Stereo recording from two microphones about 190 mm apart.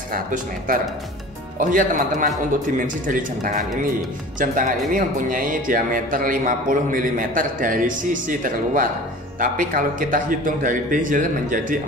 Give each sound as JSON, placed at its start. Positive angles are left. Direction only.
{"t": 0.1, "sound": "speech", "side_deg": -45}